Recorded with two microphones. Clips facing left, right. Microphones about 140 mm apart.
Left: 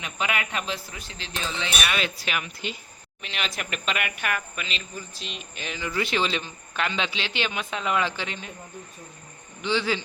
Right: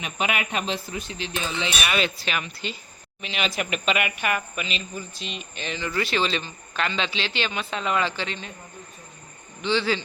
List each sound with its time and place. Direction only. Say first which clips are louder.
0.0 s speech: right 2 dB; 20° right (ahead or behind)
1.9 s speech: right 3 dB; centre (ahead or behind)
3.2 s speech: right 5 dB; centre (ahead or behind)
9.6 s a man's voice: right 2 dB; 10° left (ahead or behind)